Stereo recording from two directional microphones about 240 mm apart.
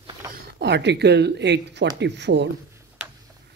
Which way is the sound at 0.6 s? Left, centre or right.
Right.